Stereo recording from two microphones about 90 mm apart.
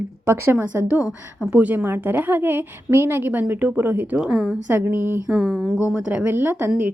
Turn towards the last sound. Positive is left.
turn(degrees=-25)  # may be behind; listen again after turning